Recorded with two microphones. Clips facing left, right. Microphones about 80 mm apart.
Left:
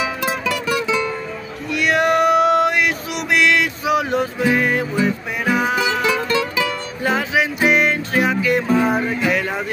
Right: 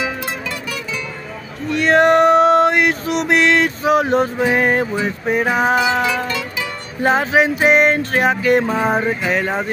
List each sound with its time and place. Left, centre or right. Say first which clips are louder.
0.2 s music: left 4 dB; left
1.7 s male singing: right 4 dB; right
7.0 s music: right 5 dB; right
8.7 s a sound: even; right